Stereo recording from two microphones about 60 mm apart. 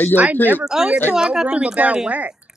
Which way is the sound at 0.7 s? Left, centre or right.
Centre.